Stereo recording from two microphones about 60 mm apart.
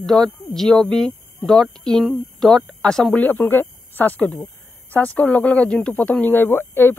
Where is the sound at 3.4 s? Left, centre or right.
Left.